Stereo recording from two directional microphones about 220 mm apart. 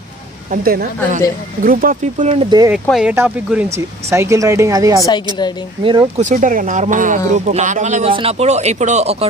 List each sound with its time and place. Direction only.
0.5 s speech: 40° right (ahead or behind)
2.7 s speech: 5° right (ahead or behind)
5.0 s a woman's voice: 20° left (ahead or behind)
5.9 s speech: 25° right (ahead or behind)
6.2 s speech: 35° right (ahead or behind)